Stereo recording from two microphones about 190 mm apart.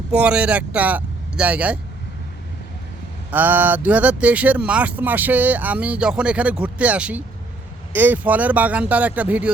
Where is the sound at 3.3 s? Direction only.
10° right (ahead or behind).